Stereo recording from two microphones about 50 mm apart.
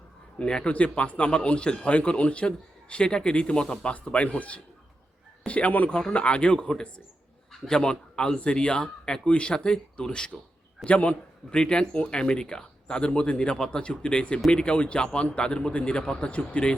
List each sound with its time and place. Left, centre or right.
0.3 s speech: centre
7.5 s a sound: centre
7.8 s speech: centre
10.8 s speech: left
11.5 s speech: centre